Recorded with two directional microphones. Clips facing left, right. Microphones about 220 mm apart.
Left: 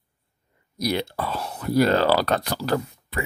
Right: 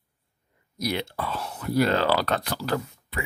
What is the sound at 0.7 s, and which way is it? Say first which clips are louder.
Speech: left 3 dB; 40° left (ahead or behind).